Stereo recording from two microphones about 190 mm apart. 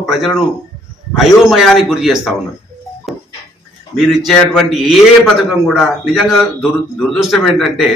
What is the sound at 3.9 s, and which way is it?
A man's voice, centre (ahead or behind).